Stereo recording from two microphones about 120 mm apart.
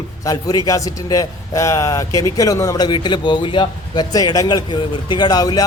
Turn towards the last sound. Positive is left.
turn(degrees=30)  # may be behind; listen again after turning